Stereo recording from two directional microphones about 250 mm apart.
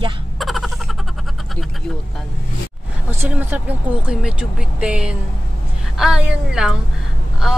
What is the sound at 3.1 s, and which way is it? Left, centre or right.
Speech, centre.